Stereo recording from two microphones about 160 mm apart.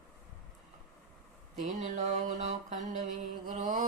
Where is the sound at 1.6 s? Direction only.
50° right (ahead or behind).